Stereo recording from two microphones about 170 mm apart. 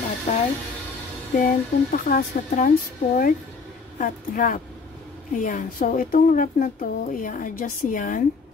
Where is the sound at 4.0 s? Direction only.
50° left (ahead or behind).